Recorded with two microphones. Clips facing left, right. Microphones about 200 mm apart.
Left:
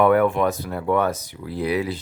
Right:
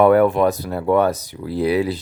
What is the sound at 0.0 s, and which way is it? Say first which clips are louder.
Speech: right 4 dB; 35° right (ahead or behind).